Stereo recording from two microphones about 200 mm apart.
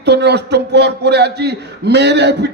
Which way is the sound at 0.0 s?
55° right (ahead or behind).